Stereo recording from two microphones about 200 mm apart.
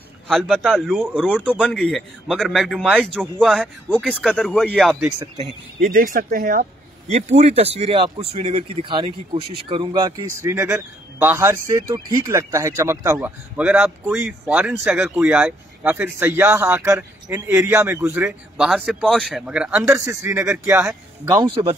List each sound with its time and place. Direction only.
0.3 s a man's voice: 5° left (ahead or behind)
5.8 s speech: 40° right (ahead or behind); by 21.7 s 25° right (ahead or behind)